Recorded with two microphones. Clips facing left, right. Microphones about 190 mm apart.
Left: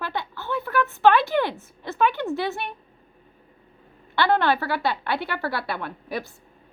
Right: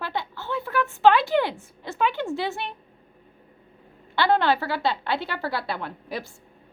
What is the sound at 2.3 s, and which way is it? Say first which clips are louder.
Speech: left 1 dB; 15° right (ahead or behind).